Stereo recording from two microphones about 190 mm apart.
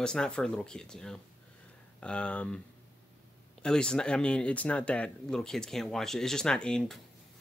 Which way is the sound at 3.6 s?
5° left (ahead or behind).